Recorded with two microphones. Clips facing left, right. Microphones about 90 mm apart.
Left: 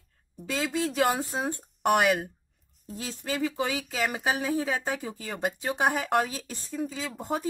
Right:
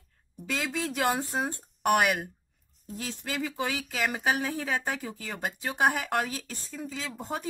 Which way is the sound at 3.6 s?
5° left (ahead or behind).